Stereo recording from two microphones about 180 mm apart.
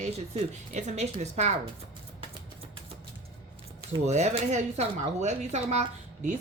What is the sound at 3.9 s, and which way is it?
Speech, 40° right (ahead or behind).